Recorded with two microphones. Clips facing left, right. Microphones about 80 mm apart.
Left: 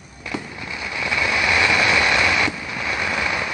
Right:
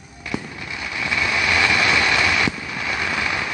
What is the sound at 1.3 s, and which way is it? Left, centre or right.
Vehicle, left.